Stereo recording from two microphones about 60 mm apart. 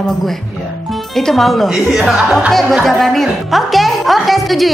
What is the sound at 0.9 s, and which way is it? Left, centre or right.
A woman's voice, centre.